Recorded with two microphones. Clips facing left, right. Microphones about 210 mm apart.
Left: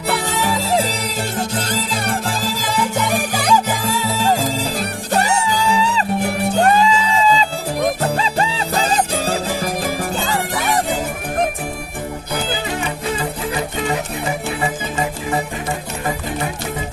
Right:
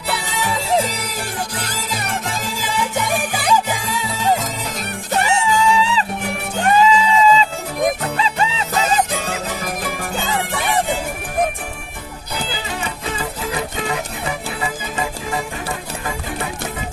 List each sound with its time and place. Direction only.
0.9 s music: 30° left (ahead or behind)
4.4 s music: 30° left (ahead or behind)